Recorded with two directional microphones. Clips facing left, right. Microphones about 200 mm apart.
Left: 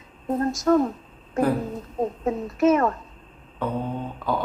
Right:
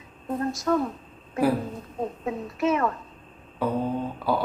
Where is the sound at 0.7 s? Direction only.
40° left (ahead or behind).